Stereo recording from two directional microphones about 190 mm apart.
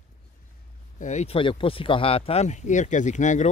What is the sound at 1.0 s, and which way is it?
Speech, 35° left (ahead or behind).